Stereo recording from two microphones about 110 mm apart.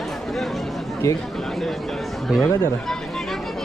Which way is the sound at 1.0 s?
25° left (ahead or behind).